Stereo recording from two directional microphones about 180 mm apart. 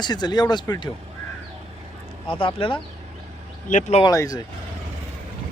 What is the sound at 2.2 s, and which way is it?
Speech, 30° left (ahead or behind).